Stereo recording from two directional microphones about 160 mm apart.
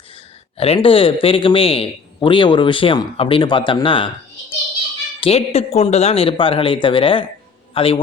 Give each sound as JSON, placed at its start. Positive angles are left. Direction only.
{"t": 0.5, "sound": "a man's voice", "side_deg": 40}